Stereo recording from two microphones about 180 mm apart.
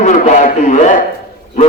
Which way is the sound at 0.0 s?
45° left (ahead or behind).